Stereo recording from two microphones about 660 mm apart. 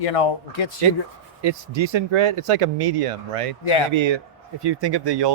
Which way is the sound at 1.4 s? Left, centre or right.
Right.